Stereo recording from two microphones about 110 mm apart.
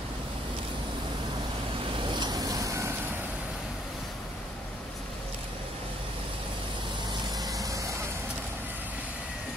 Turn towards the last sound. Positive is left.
turn(degrees=-30)  # may be behind; listen again after turning